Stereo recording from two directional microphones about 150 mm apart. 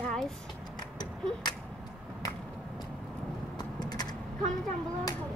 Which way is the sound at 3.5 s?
25° left (ahead or behind).